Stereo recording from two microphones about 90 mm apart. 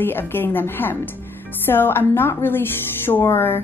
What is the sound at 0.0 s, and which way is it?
Speech, 25° left (ahead or behind).